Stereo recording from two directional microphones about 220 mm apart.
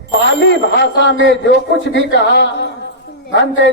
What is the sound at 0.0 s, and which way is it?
A man's voice, 55° left (ahead or behind).